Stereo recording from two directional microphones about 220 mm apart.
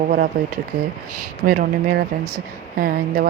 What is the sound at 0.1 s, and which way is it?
Speech, 40° right (ahead or behind).